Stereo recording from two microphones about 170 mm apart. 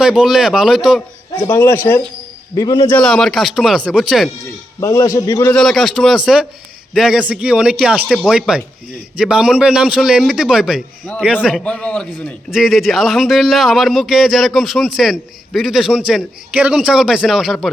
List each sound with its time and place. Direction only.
0.0 s a man's voice: 5° right (ahead or behind)
1.4 s a man's voice: 15° left (ahead or behind)
2.6 s a man's voice: 25° left (ahead or behind)
2.9 s a man's voice: 5° left (ahead or behind)
4.8 s a man's voice: 20° left (ahead or behind)
5.5 s a man's voice: centre (ahead or behind)